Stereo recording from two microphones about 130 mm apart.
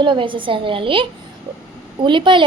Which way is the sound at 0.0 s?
40° right (ahead or behind).